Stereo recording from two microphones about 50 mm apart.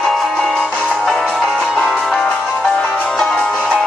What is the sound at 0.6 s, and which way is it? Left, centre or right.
Music, left.